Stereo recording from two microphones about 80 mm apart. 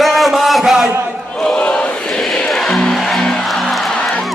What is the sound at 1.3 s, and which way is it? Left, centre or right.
Music, centre.